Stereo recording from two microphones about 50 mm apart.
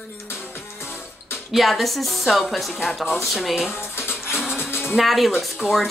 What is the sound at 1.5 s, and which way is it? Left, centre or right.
A woman's voice, centre.